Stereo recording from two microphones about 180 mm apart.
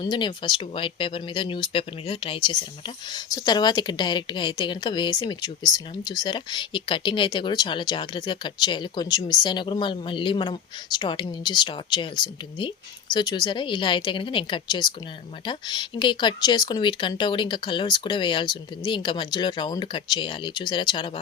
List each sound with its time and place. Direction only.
0.0 s speech: 25° left (ahead or behind)